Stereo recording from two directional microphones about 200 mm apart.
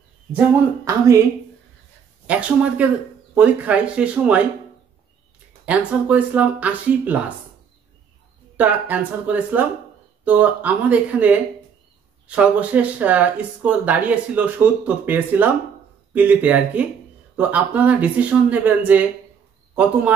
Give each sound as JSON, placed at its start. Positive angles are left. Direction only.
{"t": 0.8, "sound": "speech", "side_deg": -15}
{"t": 2.2, "sound": "speech", "side_deg": -5}
{"t": 5.7, "sound": "speech", "side_deg": -5}
{"t": 8.5, "sound": "a man's voice", "side_deg": -10}